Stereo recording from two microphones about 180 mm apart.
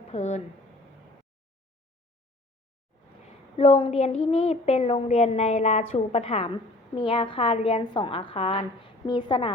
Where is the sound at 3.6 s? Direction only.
30° left (ahead or behind).